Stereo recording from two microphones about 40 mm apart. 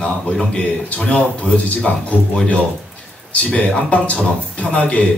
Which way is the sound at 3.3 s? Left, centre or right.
Left.